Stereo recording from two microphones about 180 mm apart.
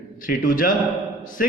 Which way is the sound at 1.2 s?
45° left (ahead or behind).